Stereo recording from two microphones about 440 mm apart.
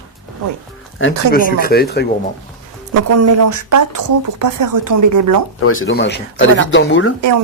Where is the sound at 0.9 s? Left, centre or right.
Left.